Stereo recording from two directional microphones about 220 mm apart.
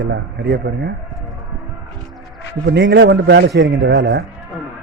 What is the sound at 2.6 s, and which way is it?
Speech, 50° right (ahead or behind).